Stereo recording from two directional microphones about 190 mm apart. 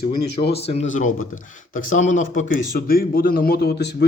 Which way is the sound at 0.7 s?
40° left (ahead or behind).